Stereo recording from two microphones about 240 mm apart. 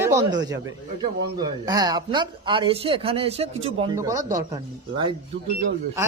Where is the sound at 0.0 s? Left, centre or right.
Centre.